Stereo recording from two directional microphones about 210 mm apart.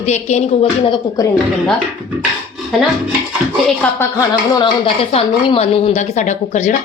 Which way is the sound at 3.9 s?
15° left (ahead or behind).